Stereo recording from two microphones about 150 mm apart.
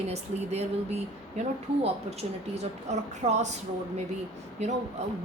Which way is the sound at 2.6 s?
50° right (ahead or behind).